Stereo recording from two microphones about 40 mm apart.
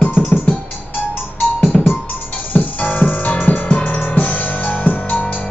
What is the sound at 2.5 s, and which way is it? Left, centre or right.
Music, left.